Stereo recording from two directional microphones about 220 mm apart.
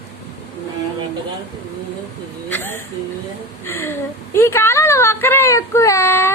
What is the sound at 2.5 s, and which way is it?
A woman's voice, 10° left (ahead or behind).